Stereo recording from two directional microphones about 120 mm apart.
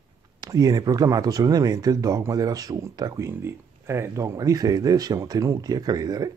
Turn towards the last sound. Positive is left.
turn(degrees=-30)  # may be behind; listen again after turning